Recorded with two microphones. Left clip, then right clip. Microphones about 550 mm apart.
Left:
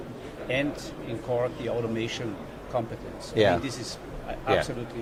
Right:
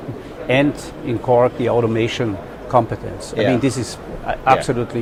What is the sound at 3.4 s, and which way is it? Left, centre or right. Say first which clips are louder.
Speech: right 4 dB; left.